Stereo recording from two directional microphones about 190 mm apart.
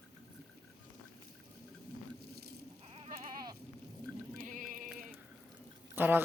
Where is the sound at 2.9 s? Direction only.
30° right (ahead or behind).